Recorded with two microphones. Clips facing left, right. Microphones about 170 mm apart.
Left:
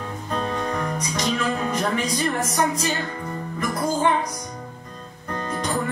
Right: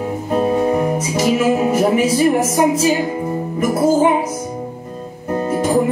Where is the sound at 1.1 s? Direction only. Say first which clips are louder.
Right 9 dB; 10° right (ahead or behind).